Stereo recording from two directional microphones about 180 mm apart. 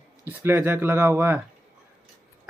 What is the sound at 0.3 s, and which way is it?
Speech, 10° right (ahead or behind).